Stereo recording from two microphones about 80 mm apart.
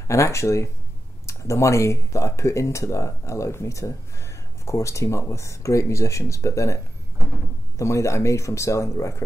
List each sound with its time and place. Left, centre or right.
0.1 s speech: left